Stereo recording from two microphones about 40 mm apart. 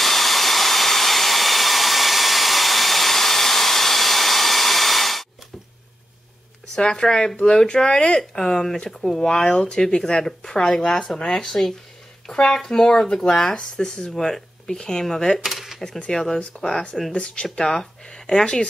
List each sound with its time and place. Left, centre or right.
0.0 s hair dryer: centre
6.7 s speech: centre
9.4 s speech: left
14.1 s speech: centre
15.3 s cutlery: centre
16.1 s speech: centre
17.1 s speech: left
17.6 s speech: centre